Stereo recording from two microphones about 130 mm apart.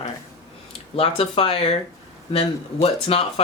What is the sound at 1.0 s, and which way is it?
Speech, 45° left (ahead or behind).